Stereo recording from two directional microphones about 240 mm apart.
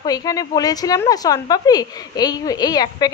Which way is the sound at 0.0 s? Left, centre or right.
Centre.